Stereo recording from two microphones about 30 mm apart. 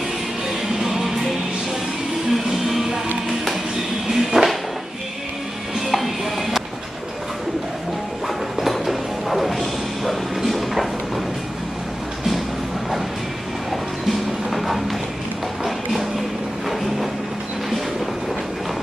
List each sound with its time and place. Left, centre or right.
0.7 s music: centre
4.1 s music: centre
5.8 s music: centre
8.6 s music: centre
14.5 s music: centre